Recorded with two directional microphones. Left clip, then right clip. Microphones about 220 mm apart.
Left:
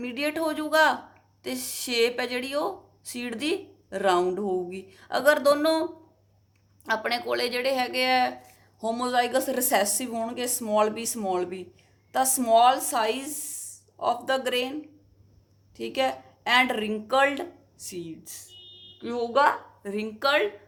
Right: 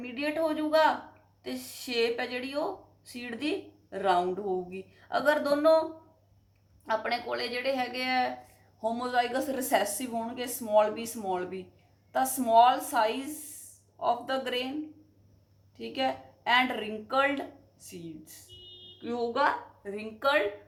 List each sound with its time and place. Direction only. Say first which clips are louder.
0.0 s speech: left 2 dB; 50° left (ahead or behind)
6.8 s speech: left 3 dB; 45° left (ahead or behind)
15.8 s speech: left 4 dB; 45° left (ahead or behind)